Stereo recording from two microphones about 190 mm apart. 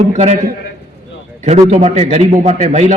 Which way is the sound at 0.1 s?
40° right (ahead or behind).